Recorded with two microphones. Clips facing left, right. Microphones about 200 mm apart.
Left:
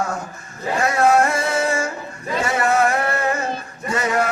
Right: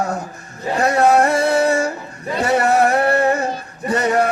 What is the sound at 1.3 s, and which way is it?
Music, 65° right (ahead or behind).